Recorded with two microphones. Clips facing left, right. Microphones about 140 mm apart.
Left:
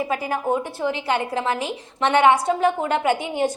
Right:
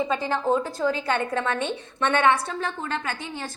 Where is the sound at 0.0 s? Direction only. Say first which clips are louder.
Left 1 dB; 10° left (ahead or behind).